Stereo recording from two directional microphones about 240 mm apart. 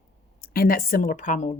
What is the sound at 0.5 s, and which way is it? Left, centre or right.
A woman's voice, left.